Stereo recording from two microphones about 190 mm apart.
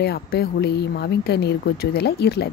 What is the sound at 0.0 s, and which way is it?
A woman's voice, 60° left (ahead or behind).